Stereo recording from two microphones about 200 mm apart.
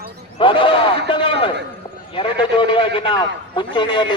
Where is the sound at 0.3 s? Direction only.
25° left (ahead or behind).